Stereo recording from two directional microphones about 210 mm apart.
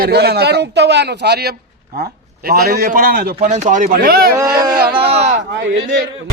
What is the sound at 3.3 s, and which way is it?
Speech, 35° right (ahead or behind).